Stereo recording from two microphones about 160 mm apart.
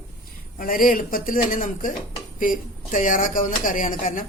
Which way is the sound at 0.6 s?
60° left (ahead or behind).